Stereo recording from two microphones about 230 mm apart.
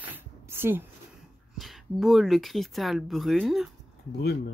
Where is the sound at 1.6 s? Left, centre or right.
Centre.